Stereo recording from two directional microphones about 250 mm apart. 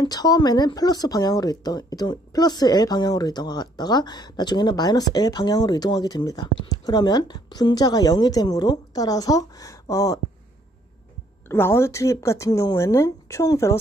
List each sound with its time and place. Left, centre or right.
0.0 s speech: centre
11.4 s speech: centre